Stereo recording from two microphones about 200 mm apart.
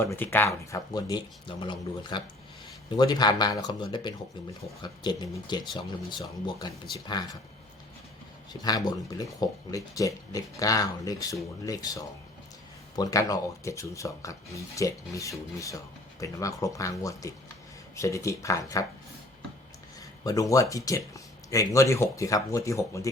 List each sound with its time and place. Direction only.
0.0 s speech: 10° left (ahead or behind)
8.6 s speech: 20° left (ahead or behind)
20.0 s speech: 15° left (ahead or behind)